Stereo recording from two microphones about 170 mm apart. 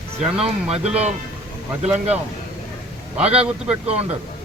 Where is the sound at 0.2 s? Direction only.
35° right (ahead or behind).